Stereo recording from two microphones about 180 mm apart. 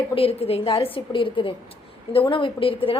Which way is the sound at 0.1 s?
30° left (ahead or behind).